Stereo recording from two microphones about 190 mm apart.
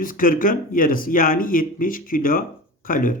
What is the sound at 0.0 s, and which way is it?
Speech, 45° left (ahead or behind).